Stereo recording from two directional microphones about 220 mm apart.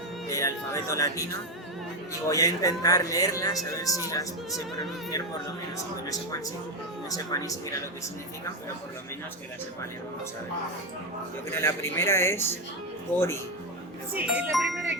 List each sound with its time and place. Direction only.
0.3 s speech: 15° left (ahead or behind)
7.1 s speech: 15° left (ahead or behind)
11.5 s speech: 10° left (ahead or behind)
14.2 s speech: 5° right (ahead or behind)